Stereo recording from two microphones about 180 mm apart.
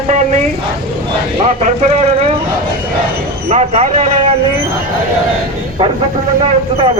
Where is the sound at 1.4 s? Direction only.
40° right (ahead or behind).